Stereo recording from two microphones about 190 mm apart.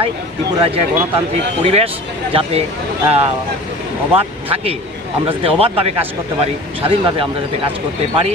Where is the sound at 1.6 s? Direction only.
30° right (ahead or behind).